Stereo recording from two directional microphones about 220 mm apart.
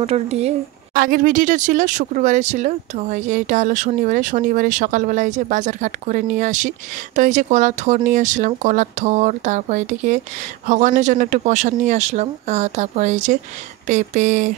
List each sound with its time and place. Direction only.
0.0 s speech: 30° right (ahead or behind)
0.9 s speech: 40° right (ahead or behind)